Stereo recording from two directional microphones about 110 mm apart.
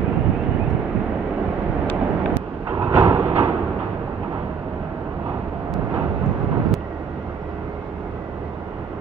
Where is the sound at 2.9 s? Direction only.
15° right (ahead or behind).